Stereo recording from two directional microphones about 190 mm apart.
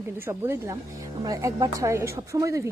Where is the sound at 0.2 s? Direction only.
10° right (ahead or behind).